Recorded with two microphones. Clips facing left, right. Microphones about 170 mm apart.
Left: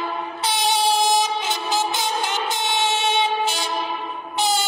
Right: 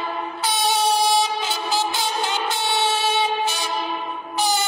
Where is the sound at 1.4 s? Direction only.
20° left (ahead or behind).